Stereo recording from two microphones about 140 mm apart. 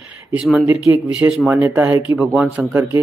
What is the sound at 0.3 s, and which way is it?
Speech, centre (ahead or behind).